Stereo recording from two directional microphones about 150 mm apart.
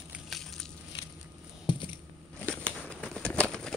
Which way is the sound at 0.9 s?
30° left (ahead or behind).